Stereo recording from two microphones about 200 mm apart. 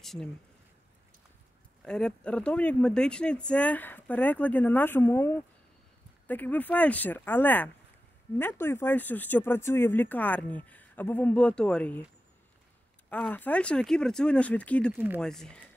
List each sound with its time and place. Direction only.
0.0 s speech: centre (ahead or behind)
1.9 s speech: 5° left (ahead or behind)
13.1 s speech: 5° left (ahead or behind)